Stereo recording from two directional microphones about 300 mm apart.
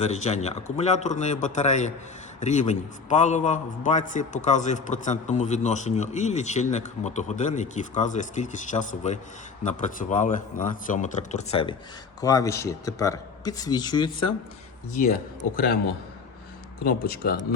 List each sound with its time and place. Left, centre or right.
0.0 s a man's voice: left
15.5 s a man's voice: left
16.8 s speech: left